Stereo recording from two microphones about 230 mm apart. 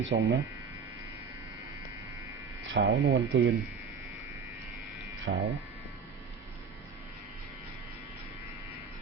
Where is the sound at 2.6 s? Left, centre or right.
Right.